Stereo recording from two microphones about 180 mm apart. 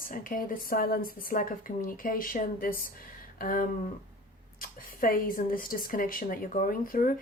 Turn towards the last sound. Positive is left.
turn(degrees=50)  # may be behind; listen again after turning